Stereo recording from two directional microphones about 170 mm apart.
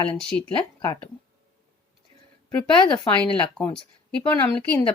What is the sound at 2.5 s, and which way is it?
Speech, 10° left (ahead or behind).